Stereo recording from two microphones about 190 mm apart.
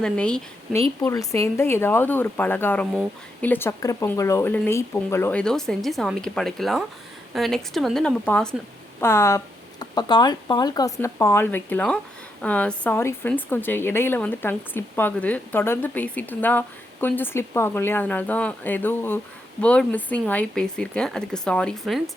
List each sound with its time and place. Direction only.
0.0 s speech: 5° left (ahead or behind)
1.0 s speech: 15° left (ahead or behind); by 22.1 s centre (ahead or behind)